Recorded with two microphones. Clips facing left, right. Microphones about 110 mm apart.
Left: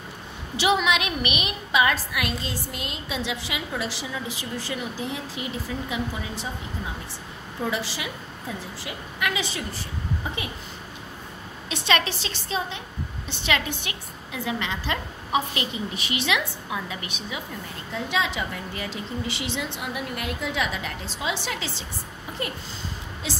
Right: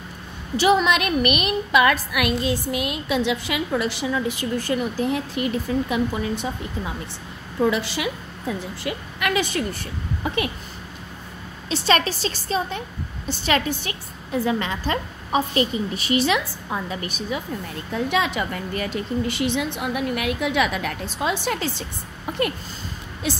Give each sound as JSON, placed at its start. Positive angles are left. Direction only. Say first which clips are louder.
{"t": 0.6, "sound": "a woman's voice", "louder": "right 4 dB", "side_deg": -45}
{"t": 7.7, "sound": "a woman's voice", "louder": "right 5 dB", "side_deg": -60}
{"t": 11.7, "sound": "a woman's voice", "louder": "right 4 dB", "side_deg": -40}
{"t": 17.9, "sound": "a woman's voice", "louder": "right 4 dB", "side_deg": -55}
{"t": 23.2, "sound": "a woman's voice", "louder": "right 6 dB", "side_deg": -55}